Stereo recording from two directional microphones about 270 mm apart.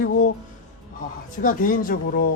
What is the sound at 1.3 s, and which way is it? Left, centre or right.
Speech, left.